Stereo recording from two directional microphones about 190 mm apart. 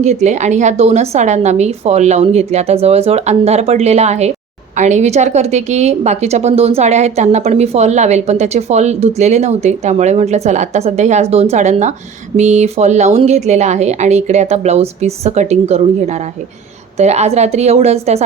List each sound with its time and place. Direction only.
0.0 s a woman's voice: 35° right (ahead or behind)